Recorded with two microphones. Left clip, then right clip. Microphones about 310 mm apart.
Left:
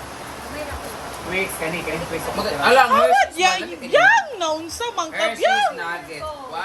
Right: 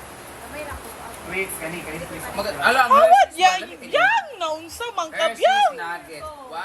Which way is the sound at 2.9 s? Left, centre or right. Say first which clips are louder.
Right 2 dB; centre.